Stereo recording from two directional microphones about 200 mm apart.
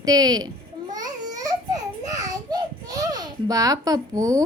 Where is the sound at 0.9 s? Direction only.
20° right (ahead or behind).